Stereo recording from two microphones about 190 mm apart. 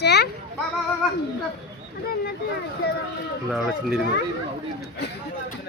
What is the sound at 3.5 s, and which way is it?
Speech, 5° right (ahead or behind).